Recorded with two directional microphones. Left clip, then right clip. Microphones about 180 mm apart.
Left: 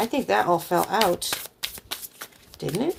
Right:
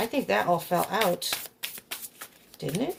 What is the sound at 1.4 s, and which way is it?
Shuffling cards, 35° left (ahead or behind).